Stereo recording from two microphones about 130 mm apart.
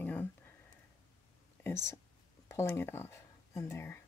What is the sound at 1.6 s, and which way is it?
Speech, 20° left (ahead or behind).